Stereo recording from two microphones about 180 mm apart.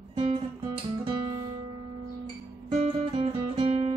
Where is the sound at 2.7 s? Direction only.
30° right (ahead or behind).